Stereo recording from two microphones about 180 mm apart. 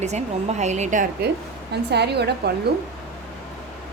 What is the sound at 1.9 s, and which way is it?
Speech, 65° right (ahead or behind).